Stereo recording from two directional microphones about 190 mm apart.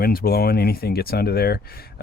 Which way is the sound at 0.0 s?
55° left (ahead or behind).